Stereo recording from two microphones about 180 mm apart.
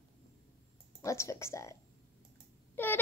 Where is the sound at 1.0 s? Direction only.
15° left (ahead or behind).